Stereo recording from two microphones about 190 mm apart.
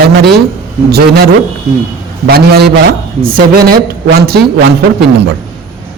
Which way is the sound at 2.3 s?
55° right (ahead or behind).